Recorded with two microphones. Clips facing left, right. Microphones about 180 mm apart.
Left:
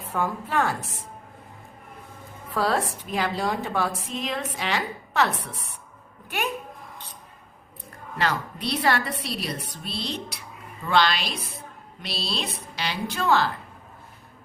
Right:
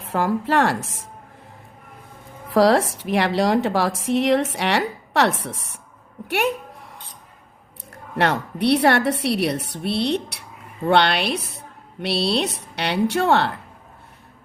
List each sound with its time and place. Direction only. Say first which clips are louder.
0.0 s speech: right 6 dB; 90° right
2.5 s a woman's voice: right 9 dB; 85° right
6.2 s a sound: right 7 dB; 80° right
8.1 s a woman's voice: right 6 dB; 65° right (ahead or behind)